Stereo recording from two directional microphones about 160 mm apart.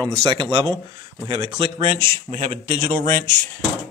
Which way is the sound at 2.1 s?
40° right (ahead or behind).